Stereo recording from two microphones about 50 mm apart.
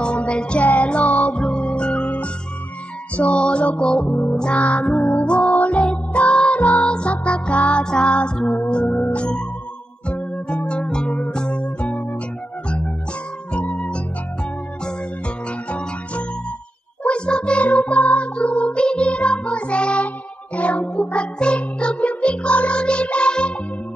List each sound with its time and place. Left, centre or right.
0.0 s music: left
4.1 s music: left
4.4 s music: left
11.1 s music: left